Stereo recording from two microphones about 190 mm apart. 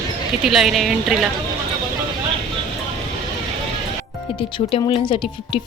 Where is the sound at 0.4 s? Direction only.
Centre (ahead or behind).